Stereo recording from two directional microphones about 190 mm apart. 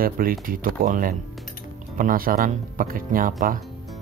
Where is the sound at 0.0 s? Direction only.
50° right (ahead or behind).